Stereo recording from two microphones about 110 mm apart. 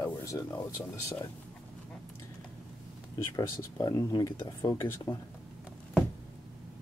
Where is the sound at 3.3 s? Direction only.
30° left (ahead or behind).